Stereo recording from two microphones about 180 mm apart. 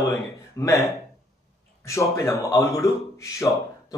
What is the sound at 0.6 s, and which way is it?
A man's voice, 20° left (ahead or behind).